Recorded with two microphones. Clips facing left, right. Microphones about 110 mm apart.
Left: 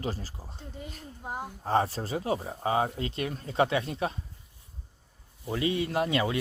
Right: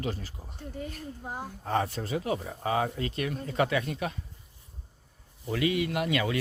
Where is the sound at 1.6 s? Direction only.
30° left (ahead or behind).